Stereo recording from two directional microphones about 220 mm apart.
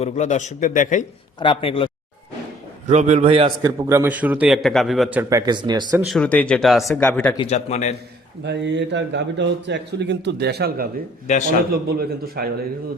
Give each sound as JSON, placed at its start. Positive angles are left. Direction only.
{"t": 0.0, "sound": "a man's voice", "side_deg": 30}
{"t": 1.4, "sound": "speech", "side_deg": 25}
{"t": 2.8, "sound": "a man's voice", "side_deg": -30}
{"t": 5.5, "sound": "speech", "side_deg": -20}
{"t": 6.1, "sound": "speech", "side_deg": 5}
{"t": 7.3, "sound": "a man's voice", "side_deg": 30}
{"t": 8.4, "sound": "a man's voice", "side_deg": -50}